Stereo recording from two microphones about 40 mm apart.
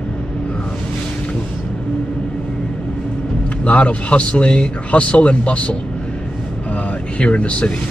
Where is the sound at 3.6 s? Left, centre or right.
Left.